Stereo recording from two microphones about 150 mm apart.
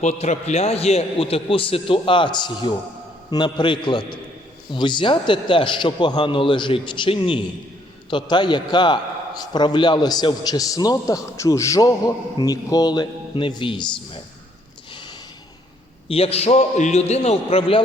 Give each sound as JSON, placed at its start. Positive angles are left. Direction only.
{"t": 0.0, "sound": "a man's voice", "side_deg": 50}
{"t": 16.0, "sound": "a man's voice", "side_deg": 40}